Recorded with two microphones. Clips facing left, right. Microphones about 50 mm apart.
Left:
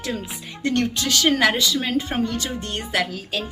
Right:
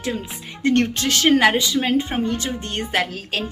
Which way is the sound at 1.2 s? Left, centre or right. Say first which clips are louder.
Right 3 dB; right.